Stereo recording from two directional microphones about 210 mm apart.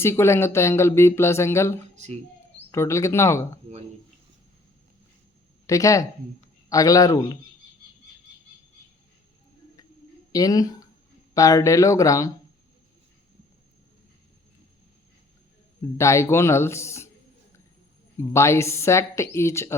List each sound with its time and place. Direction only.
0.0 s speech: 10° left (ahead or behind)
5.6 s speech: 15° left (ahead or behind)
10.3 s speech: 15° left (ahead or behind)
16.0 s speech: 15° left (ahead or behind)
18.2 s speech: 15° left (ahead or behind)